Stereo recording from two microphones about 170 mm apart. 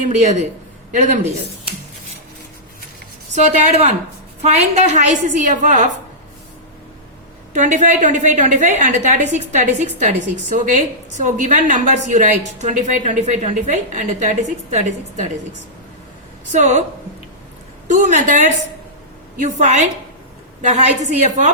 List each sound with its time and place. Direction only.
0.0 s a woman's voice: 45° right (ahead or behind)
3.3 s a woman's voice: 40° right (ahead or behind)
7.5 s a woman's voice: 45° right (ahead or behind)
16.5 s a woman's voice: 45° right (ahead or behind)
17.8 s a woman's voice: 45° right (ahead or behind)
21.2 s a woman's voice: 45° right (ahead or behind)